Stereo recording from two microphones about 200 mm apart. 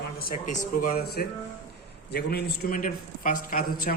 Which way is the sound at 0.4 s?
45° left (ahead or behind).